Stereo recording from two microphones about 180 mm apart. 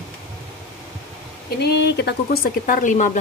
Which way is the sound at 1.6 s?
70° left (ahead or behind).